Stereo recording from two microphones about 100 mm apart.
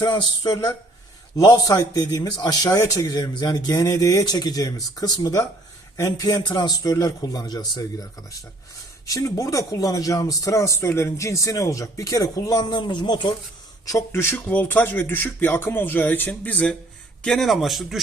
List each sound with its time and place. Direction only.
0.0 s a man's voice: 45° left (ahead or behind)
12.6 s a man's voice: 50° left (ahead or behind)
13.8 s speech: 30° left (ahead or behind); by 16.7 s 15° left (ahead or behind)
17.2 s a man's voice: 5° left (ahead or behind)